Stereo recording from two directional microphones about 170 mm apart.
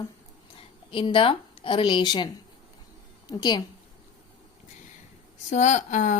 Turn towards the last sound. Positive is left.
turn(degrees=45)  # may be behind; listen again after turning